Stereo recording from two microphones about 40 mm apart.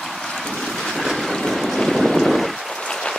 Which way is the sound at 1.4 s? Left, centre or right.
Centre.